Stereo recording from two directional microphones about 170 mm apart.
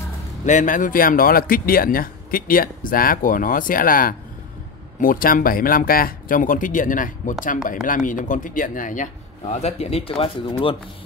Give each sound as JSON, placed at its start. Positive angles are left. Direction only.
{"t": 0.5, "sound": "speech", "side_deg": 50}